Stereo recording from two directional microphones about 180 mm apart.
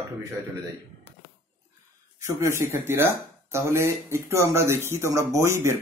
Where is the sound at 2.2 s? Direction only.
15° right (ahead or behind).